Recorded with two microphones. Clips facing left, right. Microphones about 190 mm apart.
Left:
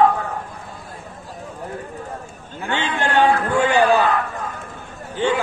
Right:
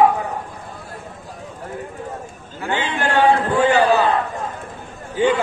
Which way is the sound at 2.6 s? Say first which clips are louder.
Right 1 dB; 20° right (ahead or behind).